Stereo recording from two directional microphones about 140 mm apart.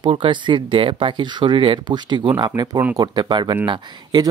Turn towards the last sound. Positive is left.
turn(degrees=-35)  # may be behind; listen again after turning